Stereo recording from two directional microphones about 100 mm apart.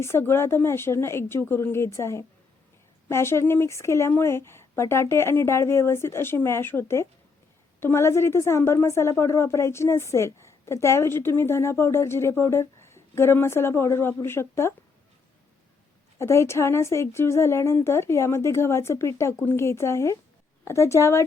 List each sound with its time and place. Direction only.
0.0 s a woman's voice: 25° left (ahead or behind)
16.1 s a woman's voice: 25° left (ahead or behind)